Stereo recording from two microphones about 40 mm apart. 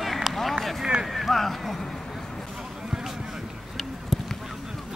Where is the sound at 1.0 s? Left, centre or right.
Centre.